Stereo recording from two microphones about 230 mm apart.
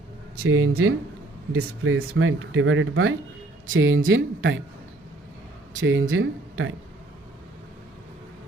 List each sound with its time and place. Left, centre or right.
0.3 s speech: right
5.8 s speech: right